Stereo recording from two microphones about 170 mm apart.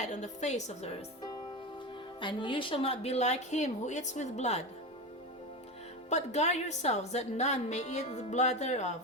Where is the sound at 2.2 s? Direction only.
30° left (ahead or behind).